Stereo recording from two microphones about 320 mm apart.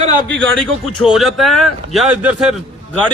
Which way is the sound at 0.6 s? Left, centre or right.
Centre.